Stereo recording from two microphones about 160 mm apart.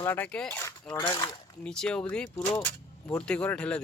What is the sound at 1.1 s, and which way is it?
Speech, 30° left (ahead or behind).